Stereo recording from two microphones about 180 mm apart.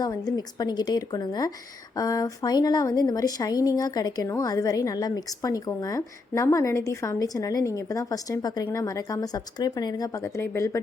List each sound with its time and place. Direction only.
0.0 s speech: 20° left (ahead or behind)